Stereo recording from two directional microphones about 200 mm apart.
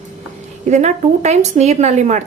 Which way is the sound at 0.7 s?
35° right (ahead or behind).